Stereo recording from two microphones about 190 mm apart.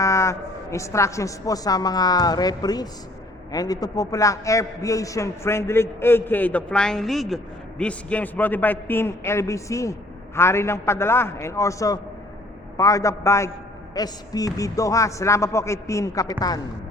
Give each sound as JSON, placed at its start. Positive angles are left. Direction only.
{"t": 0.0, "sound": "a man's voice", "side_deg": 15}